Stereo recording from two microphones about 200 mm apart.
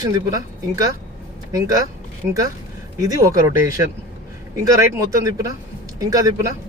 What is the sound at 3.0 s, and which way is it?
Speech, 15° right (ahead or behind).